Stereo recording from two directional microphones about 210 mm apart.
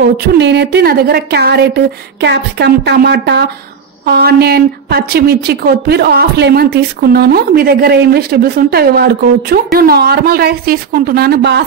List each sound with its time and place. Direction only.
0.0 s a woman's voice: 50° right (ahead or behind)